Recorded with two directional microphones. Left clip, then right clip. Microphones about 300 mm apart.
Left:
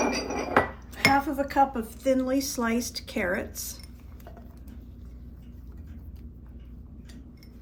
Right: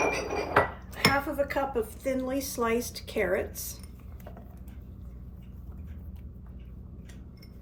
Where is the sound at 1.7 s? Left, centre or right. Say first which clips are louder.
Left 3 dB; centre.